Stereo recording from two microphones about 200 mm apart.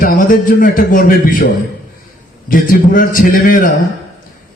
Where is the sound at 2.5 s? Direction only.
45° left (ahead or behind).